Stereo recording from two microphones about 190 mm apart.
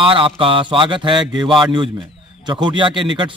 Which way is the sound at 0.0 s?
30° right (ahead or behind).